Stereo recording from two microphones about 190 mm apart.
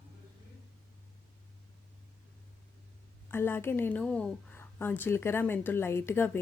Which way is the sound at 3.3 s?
10° left (ahead or behind).